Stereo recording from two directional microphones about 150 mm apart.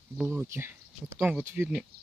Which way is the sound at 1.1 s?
5° right (ahead or behind).